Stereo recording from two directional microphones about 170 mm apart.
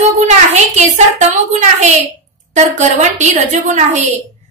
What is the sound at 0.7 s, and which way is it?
A woman's voice, 40° right (ahead or behind).